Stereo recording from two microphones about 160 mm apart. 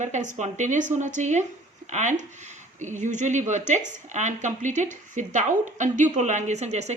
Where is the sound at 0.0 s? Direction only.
50° right (ahead or behind).